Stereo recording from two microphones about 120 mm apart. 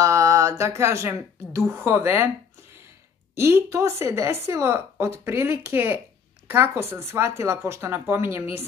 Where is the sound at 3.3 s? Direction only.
20° right (ahead or behind).